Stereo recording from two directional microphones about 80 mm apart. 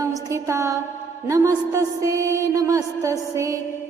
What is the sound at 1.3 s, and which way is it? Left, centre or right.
Music, right.